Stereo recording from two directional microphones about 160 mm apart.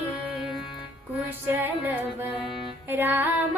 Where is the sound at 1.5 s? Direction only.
10° right (ahead or behind).